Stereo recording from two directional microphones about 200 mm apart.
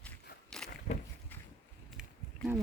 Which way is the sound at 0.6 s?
5° left (ahead or behind).